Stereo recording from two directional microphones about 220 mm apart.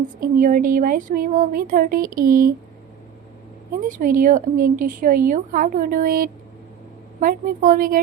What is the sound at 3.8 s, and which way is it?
Speech, 35° right (ahead or behind).